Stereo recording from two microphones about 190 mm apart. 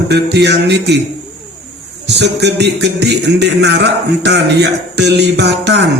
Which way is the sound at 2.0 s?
65° right (ahead or behind).